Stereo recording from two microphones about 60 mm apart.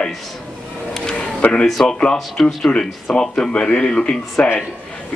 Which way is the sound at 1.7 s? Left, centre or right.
Centre.